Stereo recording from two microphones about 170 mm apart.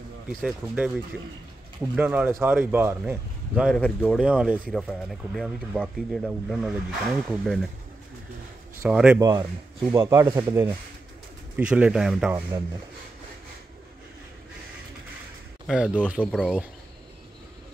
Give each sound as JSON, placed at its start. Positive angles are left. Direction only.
{"t": 0.4, "sound": "speech", "side_deg": -5}
{"t": 8.8, "sound": "speech", "side_deg": -5}
{"t": 9.2, "sound": "speech", "side_deg": -25}
{"t": 15.6, "sound": "speech", "side_deg": -5}
{"t": 16.2, "sound": "speech", "side_deg": 5}